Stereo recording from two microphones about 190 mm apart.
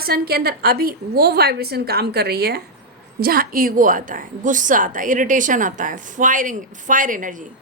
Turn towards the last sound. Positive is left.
turn(degrees=-45)  # may be behind; listen again after turning